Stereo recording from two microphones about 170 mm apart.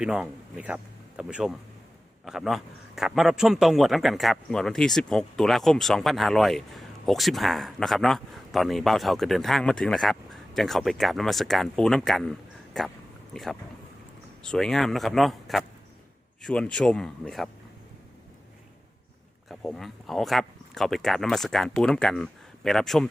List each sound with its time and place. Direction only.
0.0 s a man's voice: 5° right (ahead or behind)
19.5 s a man's voice: centre (ahead or behind)